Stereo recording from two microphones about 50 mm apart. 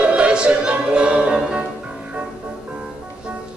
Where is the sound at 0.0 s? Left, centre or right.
Right.